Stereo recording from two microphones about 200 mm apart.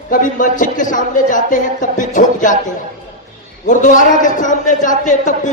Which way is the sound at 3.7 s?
40° left (ahead or behind).